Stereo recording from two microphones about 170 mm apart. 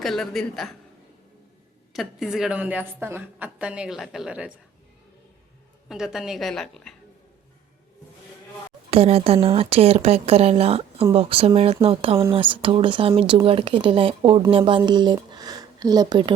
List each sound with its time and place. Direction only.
0.0 s a woman's voice: centre (ahead or behind)
1.9 s a woman's voice: centre (ahead or behind)
5.9 s a woman's voice: 5° right (ahead or behind)
8.9 s speech: 35° right (ahead or behind)